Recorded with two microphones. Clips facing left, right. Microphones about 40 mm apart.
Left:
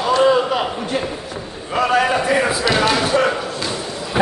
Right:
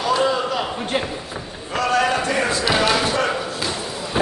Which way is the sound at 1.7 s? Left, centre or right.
Centre.